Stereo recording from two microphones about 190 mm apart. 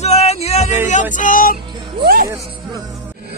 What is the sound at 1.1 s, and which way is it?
Speech, 45° left (ahead or behind).